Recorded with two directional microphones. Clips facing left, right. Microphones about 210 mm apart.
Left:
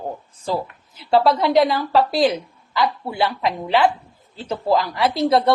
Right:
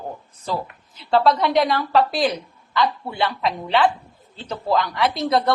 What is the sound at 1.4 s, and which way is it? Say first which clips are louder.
Speech: left 3 dB; 25° left (ahead or behind).